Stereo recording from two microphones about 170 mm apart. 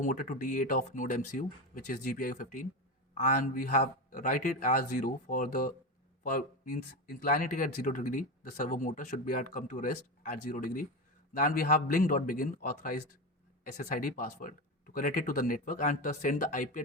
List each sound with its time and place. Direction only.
0.0 s speech: 50° left (ahead or behind)